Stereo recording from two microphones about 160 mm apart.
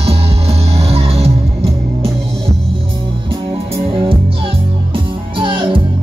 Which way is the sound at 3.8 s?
35° right (ahead or behind).